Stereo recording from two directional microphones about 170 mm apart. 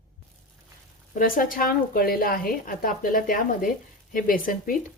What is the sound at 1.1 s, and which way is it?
A woman's voice, 55° left (ahead or behind).